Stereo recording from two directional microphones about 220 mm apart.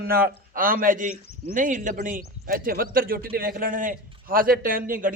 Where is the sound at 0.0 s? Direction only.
40° right (ahead or behind).